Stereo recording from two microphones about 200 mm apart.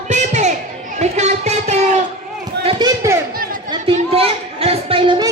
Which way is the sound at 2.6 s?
25° right (ahead or behind).